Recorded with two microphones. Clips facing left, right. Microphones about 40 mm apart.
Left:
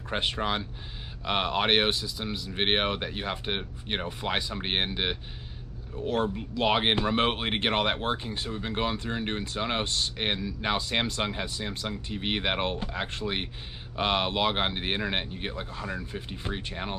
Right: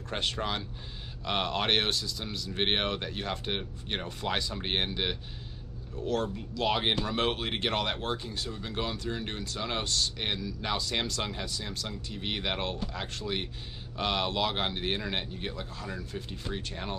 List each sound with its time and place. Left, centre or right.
0.1 s speech: left